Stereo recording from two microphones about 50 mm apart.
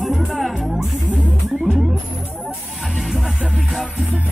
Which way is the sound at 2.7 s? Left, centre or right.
Centre.